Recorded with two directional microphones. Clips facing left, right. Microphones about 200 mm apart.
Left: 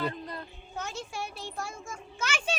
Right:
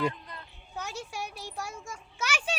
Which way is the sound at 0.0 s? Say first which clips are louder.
Right 2 dB; 40° left (ahead or behind).